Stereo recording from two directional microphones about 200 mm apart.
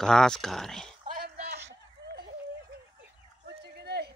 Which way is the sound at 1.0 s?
50° right (ahead or behind).